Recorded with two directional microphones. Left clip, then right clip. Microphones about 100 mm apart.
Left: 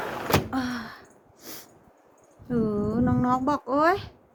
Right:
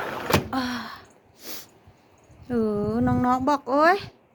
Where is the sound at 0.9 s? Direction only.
25° left (ahead or behind).